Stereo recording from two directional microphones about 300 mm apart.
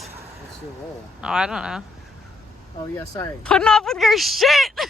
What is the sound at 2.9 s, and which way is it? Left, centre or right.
Speech, centre.